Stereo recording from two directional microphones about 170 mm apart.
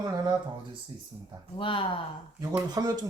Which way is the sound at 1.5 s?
30° left (ahead or behind).